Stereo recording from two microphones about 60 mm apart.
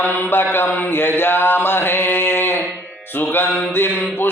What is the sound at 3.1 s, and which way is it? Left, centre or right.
Music, left.